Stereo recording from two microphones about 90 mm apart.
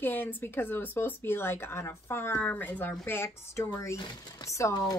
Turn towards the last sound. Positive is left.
turn(degrees=35)  # may be behind; listen again after turning